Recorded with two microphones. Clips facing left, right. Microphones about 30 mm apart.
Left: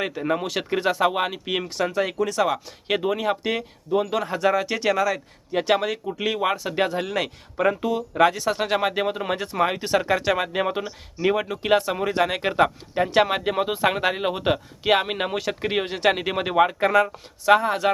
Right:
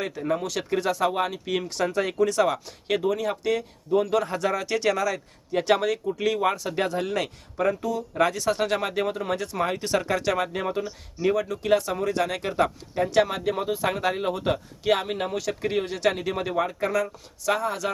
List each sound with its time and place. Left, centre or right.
0.1 s speech: left
1.6 s speech: centre
2.8 s speech: left
4.1 s speech: centre
7.5 s speech: left
8.1 s speech: centre